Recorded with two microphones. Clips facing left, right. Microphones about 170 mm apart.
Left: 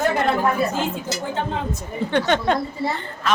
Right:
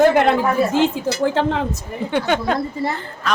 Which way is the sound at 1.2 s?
75° right (ahead or behind).